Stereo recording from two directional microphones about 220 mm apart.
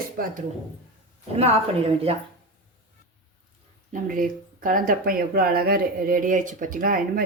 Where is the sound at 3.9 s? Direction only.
40° right (ahead or behind).